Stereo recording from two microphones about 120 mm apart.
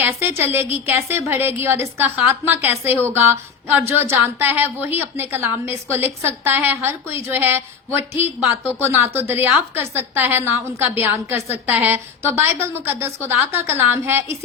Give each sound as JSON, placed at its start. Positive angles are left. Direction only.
{"t": 0.0, "sound": "a woman's voice", "side_deg": -20}